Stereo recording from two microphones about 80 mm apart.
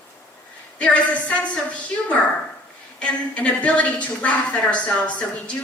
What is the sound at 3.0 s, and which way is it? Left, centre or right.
A woman's voice, centre.